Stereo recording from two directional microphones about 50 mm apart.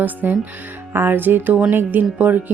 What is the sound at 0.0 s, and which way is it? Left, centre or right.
A woman's voice, right.